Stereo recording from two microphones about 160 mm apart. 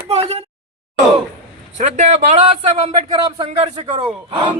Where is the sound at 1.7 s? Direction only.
45° right (ahead or behind).